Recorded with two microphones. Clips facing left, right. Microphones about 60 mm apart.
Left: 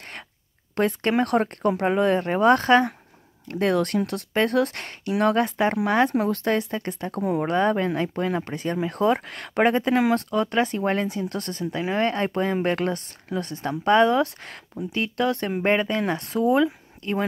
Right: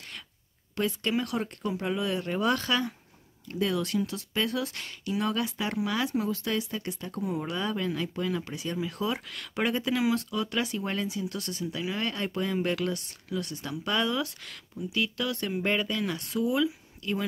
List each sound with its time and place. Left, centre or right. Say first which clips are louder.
0.7 s speech: left 7 dB; left